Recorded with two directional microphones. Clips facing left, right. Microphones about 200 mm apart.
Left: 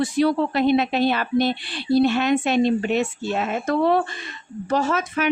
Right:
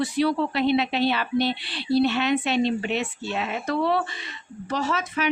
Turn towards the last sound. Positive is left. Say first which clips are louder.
# left 4 dB
turn(degrees=50)  # may be behind; listen again after turning